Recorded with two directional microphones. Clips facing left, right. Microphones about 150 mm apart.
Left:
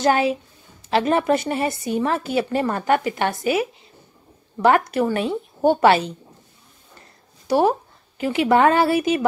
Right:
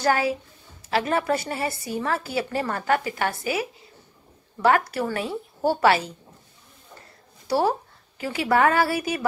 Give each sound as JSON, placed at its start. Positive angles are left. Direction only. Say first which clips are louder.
{"t": 0.0, "sound": "a woman's voice", "louder": "left 4 dB", "side_deg": 25}
{"t": 7.4, "sound": "a woman's voice", "louder": "left 4 dB", "side_deg": 20}